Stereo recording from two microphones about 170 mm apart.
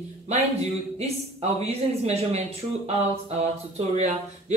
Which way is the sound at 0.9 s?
40° right (ahead or behind).